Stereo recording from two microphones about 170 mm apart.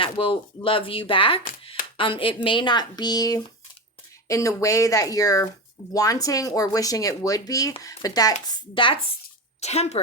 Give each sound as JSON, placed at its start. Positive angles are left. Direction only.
{"t": 0.0, "sound": "speech", "side_deg": 30}
{"t": 9.6, "sound": "a woman's voice", "side_deg": 40}